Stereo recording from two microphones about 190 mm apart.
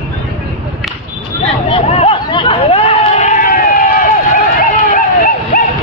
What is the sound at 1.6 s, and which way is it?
Chatter, 30° left (ahead or behind).